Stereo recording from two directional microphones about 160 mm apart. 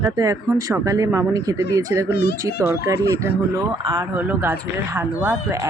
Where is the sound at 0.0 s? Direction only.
20° right (ahead or behind).